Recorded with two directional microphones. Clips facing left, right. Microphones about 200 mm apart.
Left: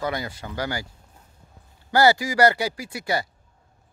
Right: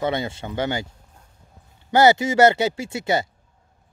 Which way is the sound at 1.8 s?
20° right (ahead or behind).